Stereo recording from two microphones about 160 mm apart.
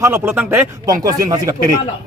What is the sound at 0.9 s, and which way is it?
Speech, 20° right (ahead or behind).